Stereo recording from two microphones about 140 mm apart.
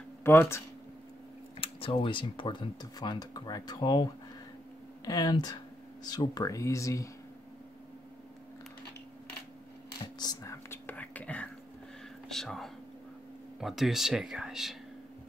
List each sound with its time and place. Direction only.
0.2 s speech: 15° left (ahead or behind)
1.6 s speech: 40° left (ahead or behind); by 7.1 s 20° left (ahead or behind)
10.1 s whispering: 30° left (ahead or behind); by 11.4 s 10° left (ahead or behind)
12.3 s speech: centre (ahead or behind)